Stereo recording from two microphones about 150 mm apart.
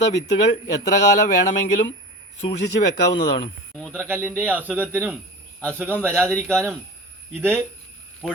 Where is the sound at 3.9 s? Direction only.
15° right (ahead or behind).